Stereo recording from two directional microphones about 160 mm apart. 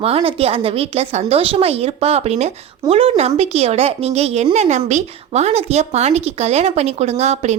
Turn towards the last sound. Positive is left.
turn(degrees=-45)  # may be behind; listen again after turning